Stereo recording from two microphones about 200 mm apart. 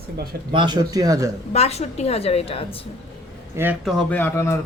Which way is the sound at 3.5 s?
10° right (ahead or behind).